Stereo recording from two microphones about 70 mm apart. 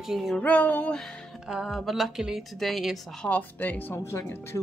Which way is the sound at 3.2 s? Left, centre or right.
Left.